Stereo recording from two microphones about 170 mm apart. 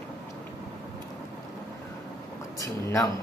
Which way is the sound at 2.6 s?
20° left (ahead or behind).